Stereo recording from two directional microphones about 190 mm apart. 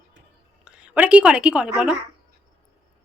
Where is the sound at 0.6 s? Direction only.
5° right (ahead or behind).